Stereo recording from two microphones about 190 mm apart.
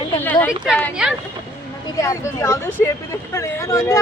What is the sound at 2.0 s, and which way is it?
Speech, 15° left (ahead or behind).